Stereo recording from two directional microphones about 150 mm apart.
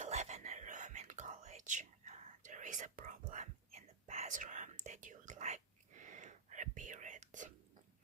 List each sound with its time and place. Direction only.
0.0 s whispering: 50° right (ahead or behind)